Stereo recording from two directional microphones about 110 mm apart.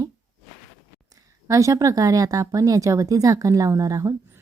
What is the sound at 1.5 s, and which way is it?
A woman's voice, 30° right (ahead or behind).